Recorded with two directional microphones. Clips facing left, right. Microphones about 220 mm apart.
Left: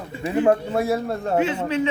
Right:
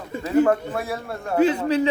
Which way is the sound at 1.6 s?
35° right (ahead or behind).